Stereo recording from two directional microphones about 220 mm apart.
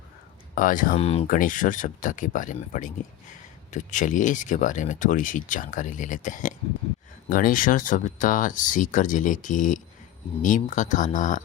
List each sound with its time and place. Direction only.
0.5 s speech: 40° left (ahead or behind)
0.9 s speech: 25° left (ahead or behind)